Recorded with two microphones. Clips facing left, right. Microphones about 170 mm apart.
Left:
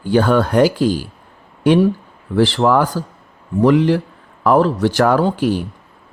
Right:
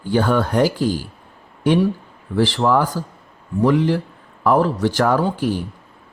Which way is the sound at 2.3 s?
80° left.